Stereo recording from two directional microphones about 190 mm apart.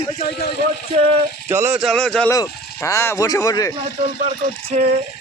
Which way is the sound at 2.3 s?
15° left (ahead or behind).